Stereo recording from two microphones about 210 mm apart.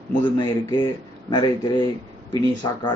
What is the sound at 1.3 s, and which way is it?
A man's voice, 20° left (ahead or behind).